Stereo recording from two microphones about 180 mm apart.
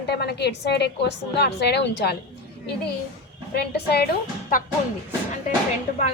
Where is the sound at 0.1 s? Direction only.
65° left (ahead or behind).